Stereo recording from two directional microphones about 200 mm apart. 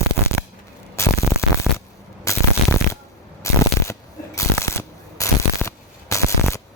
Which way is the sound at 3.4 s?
15° left (ahead or behind).